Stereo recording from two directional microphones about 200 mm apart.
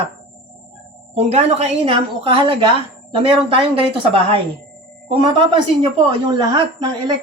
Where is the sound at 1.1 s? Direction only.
30° right (ahead or behind).